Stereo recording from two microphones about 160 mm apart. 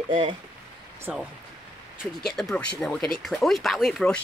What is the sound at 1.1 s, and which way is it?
Speech, 5° right (ahead or behind).